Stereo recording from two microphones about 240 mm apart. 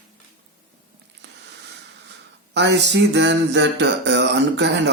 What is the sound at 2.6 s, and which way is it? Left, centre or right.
Speech, right.